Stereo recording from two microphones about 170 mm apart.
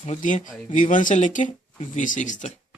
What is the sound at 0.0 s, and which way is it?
Speech, 45° left (ahead or behind).